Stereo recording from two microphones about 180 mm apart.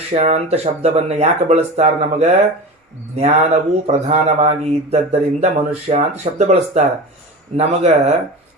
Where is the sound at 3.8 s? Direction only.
35° right (ahead or behind).